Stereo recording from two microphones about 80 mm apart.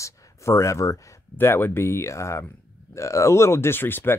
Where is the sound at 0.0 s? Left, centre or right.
Left.